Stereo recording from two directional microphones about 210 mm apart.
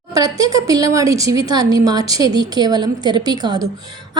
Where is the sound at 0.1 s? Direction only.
15° right (ahead or behind).